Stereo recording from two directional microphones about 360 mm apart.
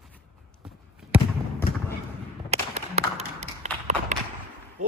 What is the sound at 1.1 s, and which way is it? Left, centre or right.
Basketball bounce, centre.